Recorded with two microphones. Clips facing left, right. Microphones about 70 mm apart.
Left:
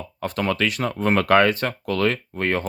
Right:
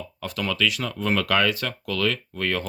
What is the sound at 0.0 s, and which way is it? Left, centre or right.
Speech, left.